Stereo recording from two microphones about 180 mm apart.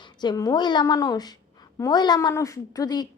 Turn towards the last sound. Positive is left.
turn(degrees=20)  # may be behind; listen again after turning